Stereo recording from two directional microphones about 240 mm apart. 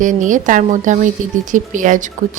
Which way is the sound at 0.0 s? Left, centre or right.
Right.